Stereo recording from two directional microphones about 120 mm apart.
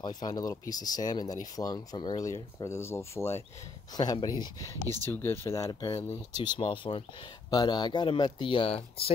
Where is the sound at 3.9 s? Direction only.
35° left (ahead or behind).